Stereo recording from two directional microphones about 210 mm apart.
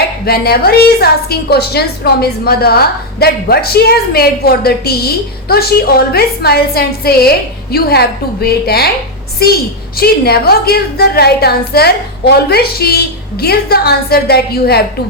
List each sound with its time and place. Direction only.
0.3 s a woman's voice: 45° left (ahead or behind)
10.0 s a woman's voice: 45° left (ahead or behind)